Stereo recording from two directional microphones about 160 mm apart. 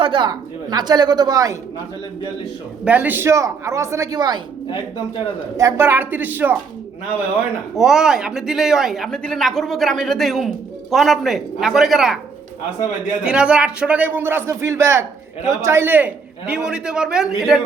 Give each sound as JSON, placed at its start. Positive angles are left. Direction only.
{"t": 0.0, "sound": "a woman's voice", "side_deg": -30}
{"t": 2.8, "sound": "a man's voice", "side_deg": -10}
{"t": 5.5, "sound": "a man's voice", "side_deg": -15}
{"t": 7.8, "sound": "speech", "side_deg": -5}
{"t": 13.2, "sound": "a man's voice", "side_deg": -5}